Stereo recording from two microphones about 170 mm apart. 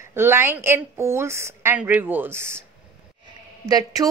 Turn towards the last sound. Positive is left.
turn(degrees=-25)  # may be behind; listen again after turning